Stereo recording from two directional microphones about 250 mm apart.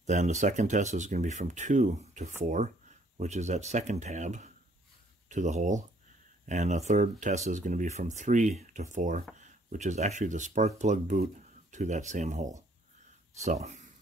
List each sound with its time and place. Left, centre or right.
0.0 s speech: right